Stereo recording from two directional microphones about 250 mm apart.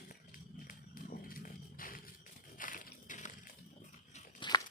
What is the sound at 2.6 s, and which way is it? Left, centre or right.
Crushing, left.